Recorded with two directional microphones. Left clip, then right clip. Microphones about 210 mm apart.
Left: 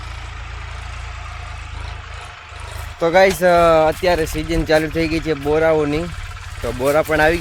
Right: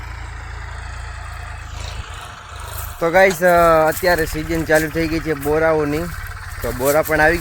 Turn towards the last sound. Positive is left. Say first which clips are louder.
# even
turn(degrees=5)  # may be behind; listen again after turning